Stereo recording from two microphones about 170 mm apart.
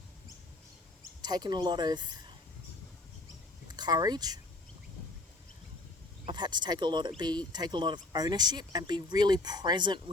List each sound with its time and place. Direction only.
1.2 s speech: 25° right (ahead or behind)
3.7 s speech: 25° right (ahead or behind)
6.2 s speech: 25° right (ahead or behind)